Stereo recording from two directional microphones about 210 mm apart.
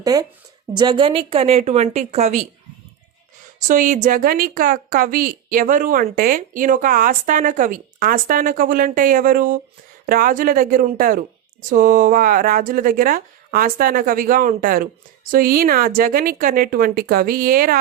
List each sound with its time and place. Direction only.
0.0 s a woman's voice: 20° right (ahead or behind)
3.7 s a woman's voice: 35° right (ahead or behind)